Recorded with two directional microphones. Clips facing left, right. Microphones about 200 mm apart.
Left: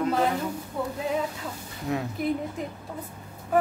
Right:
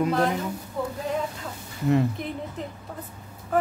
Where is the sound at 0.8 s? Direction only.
Centre (ahead or behind).